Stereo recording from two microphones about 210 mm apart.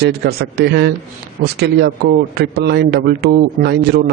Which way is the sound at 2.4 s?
50° right (ahead or behind).